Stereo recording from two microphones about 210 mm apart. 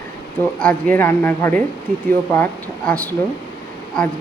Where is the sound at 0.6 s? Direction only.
5° left (ahead or behind).